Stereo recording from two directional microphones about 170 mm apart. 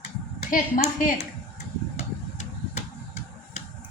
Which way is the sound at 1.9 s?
40° left (ahead or behind).